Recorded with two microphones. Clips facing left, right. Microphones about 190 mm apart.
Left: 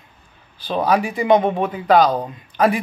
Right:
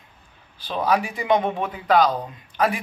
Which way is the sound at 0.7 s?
40° left (ahead or behind).